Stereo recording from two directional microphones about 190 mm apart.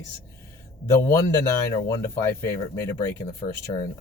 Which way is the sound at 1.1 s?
15° left (ahead or behind).